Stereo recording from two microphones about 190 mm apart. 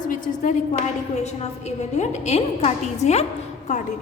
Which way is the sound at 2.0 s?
35° left (ahead or behind).